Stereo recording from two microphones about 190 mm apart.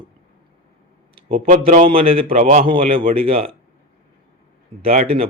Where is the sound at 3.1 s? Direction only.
30° right (ahead or behind).